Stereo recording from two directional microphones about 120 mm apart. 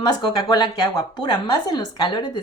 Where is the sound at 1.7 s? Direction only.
35° left (ahead or behind).